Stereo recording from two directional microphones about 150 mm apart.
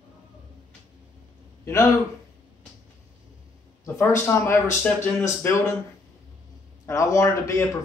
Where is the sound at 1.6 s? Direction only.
15° left (ahead or behind).